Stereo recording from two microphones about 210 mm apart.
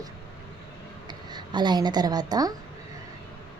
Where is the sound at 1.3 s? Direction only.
20° right (ahead or behind).